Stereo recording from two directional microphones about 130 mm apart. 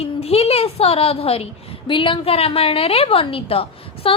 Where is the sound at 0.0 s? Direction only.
50° left (ahead or behind).